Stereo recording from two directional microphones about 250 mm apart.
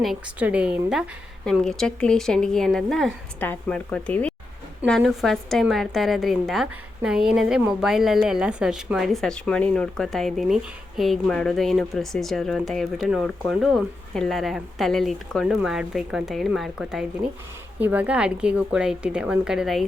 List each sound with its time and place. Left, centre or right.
0.0 s a woman's voice: centre